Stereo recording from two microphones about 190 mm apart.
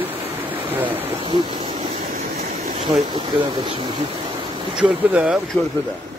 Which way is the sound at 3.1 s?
25° right (ahead or behind).